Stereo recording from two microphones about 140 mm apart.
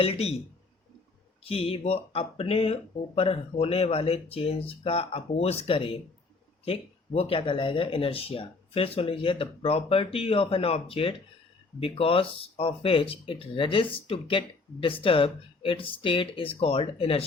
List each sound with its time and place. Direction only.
0.0 s speech: 45° left (ahead or behind)
1.5 s speech: 45° left (ahead or behind)